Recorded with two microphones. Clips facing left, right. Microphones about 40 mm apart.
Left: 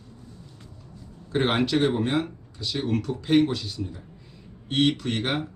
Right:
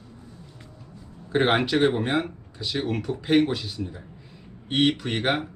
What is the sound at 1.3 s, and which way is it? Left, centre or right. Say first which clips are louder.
Speech: right 2 dB; centre.